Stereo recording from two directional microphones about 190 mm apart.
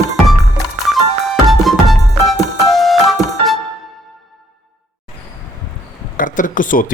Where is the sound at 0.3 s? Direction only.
Centre (ahead or behind).